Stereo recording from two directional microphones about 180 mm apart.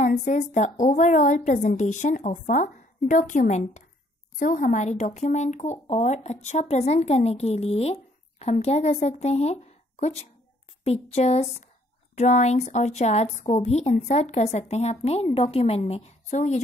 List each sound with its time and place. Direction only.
0.2 s a woman's voice: 40° left (ahead or behind)